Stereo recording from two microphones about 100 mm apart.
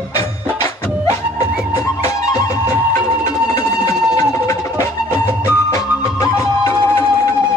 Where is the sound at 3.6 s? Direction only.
30° left (ahead or behind).